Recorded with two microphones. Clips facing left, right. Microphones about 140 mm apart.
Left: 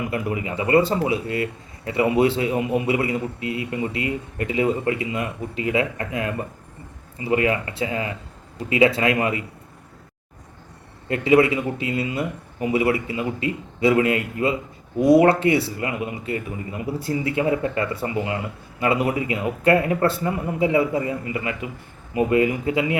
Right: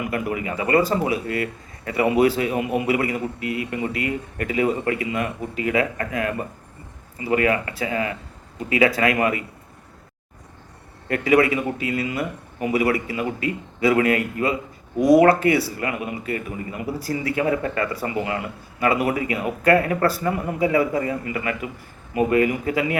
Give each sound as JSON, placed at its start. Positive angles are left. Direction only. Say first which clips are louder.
{"t": 0.1, "sound": "speech", "louder": "even", "side_deg": 25}
{"t": 11.1, "sound": "speech", "louder": "left 1 dB", "side_deg": 25}